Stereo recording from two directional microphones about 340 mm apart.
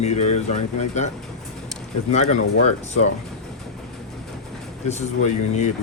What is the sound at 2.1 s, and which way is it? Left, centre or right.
Speech, centre.